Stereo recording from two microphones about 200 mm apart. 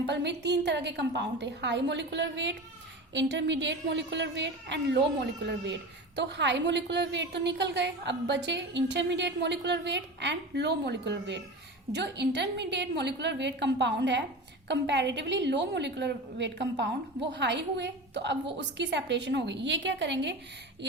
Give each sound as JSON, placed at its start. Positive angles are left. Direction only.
{"t": 0.0, "sound": "a woman's voice", "side_deg": -60}